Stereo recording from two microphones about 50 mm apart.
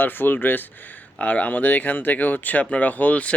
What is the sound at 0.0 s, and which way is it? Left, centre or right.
Speech, left.